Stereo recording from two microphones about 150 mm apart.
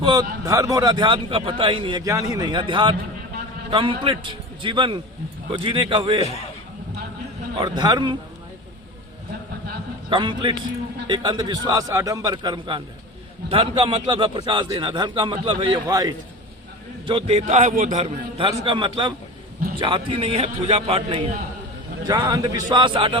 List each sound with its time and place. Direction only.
0.0 s a man's voice: 30° right (ahead or behind)
6.2 s a man's voice: 45° left (ahead or behind)
7.6 s a man's voice: 30° right (ahead or behind)
10.1 s a man's voice: 30° right (ahead or behind)
17.1 s a man's voice: 40° right (ahead or behind); by 18.0 s 55° right (ahead or behind)
18.0 s a man's voice: 35° right (ahead or behind)
22.0 s a man's voice: 25° right (ahead or behind)